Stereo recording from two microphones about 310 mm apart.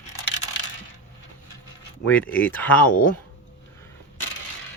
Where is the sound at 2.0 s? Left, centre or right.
Centre.